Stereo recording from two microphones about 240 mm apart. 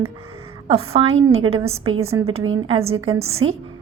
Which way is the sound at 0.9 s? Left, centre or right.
Right.